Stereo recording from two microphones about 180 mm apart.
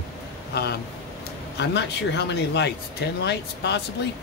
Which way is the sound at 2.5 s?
70° left (ahead or behind).